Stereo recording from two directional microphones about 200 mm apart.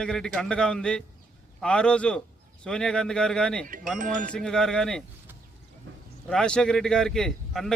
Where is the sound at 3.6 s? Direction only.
40° right (ahead or behind).